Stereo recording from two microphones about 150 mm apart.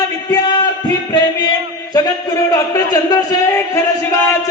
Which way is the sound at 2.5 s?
25° left (ahead or behind).